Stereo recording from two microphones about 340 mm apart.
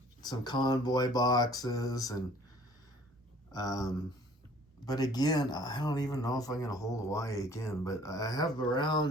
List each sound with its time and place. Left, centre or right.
0.2 s speech: centre
3.5 s speech: centre